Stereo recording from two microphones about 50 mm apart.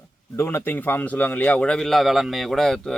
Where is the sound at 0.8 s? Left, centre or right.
Left.